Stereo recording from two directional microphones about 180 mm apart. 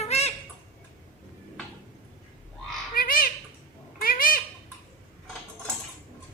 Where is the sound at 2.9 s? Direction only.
50° left (ahead or behind).